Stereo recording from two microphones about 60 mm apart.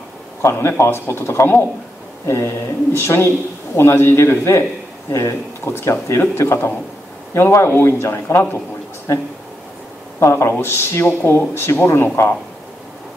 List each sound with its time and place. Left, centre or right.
0.4 s speech: left
10.2 s speech: left